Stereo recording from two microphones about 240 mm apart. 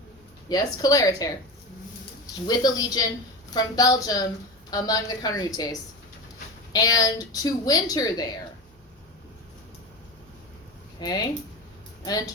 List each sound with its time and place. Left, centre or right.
0.4 s a woman's voice: centre
6.7 s a woman's voice: centre
11.0 s a woman's voice: centre